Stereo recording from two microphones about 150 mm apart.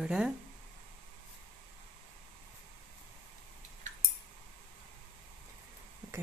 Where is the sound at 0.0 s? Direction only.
5° right (ahead or behind).